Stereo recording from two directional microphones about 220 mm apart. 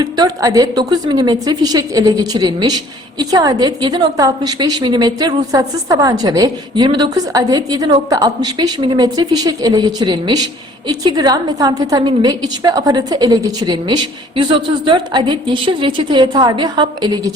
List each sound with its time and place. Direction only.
0.0 s a woman's voice: 15° right (ahead or behind)